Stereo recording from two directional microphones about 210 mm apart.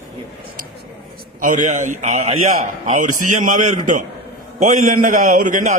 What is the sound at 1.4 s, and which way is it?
A man's voice, 35° right (ahead or behind).